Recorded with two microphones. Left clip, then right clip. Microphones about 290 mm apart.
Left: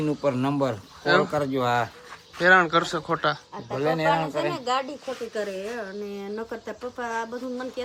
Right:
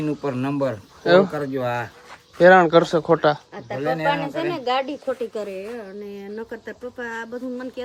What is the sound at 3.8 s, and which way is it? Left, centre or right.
Speech, centre.